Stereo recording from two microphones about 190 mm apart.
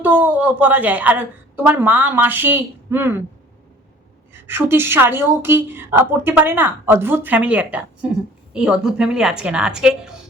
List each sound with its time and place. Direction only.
0.0 s a woman's voice: 10° right (ahead or behind)
4.4 s a woman's voice: 10° right (ahead or behind)